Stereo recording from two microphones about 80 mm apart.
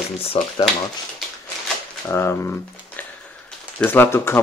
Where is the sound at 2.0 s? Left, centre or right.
Left.